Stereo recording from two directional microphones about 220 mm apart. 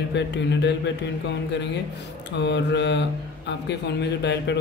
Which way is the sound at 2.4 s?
50° left (ahead or behind).